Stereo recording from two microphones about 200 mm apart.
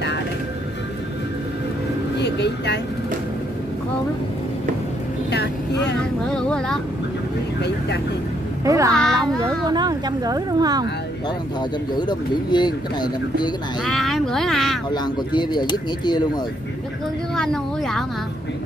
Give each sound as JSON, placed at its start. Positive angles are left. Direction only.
{"t": 2.1, "sound": "vehicle", "side_deg": 60}
{"t": 5.3, "sound": "vehicle", "side_deg": 55}
{"t": 5.9, "sound": "speech", "side_deg": 5}
{"t": 8.6, "sound": "a child's voice", "side_deg": -15}
{"t": 8.9, "sound": "speech", "side_deg": 5}
{"t": 9.4, "sound": "speech", "side_deg": -20}
{"t": 12.0, "sound": "speech", "side_deg": 20}
{"t": 13.8, "sound": "speech", "side_deg": 0}
{"t": 14.9, "sound": "speech", "side_deg": 20}
{"t": 17.4, "sound": "speech", "side_deg": 0}